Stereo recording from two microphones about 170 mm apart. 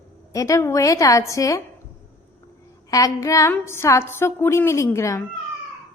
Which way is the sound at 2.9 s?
20° left (ahead or behind).